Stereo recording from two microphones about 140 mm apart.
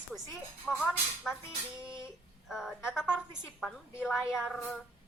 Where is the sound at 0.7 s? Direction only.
10° right (ahead or behind).